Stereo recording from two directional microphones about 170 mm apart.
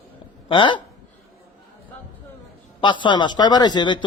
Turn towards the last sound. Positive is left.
turn(degrees=25)  # may be behind; listen again after turning